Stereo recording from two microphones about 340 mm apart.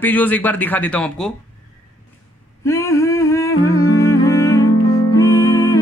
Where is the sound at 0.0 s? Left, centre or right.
Centre.